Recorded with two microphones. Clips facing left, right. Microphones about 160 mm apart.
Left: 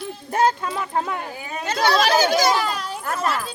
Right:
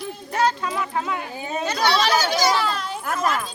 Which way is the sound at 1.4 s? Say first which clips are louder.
Right 4 dB; 25° right (ahead or behind).